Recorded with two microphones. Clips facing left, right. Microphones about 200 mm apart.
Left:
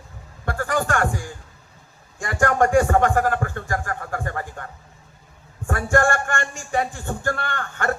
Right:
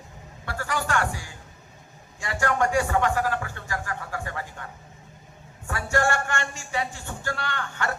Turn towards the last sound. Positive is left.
turn(degrees=50)  # may be behind; listen again after turning